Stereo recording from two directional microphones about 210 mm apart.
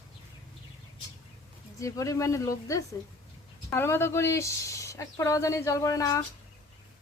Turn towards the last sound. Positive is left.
turn(degrees=15)  # may be behind; listen again after turning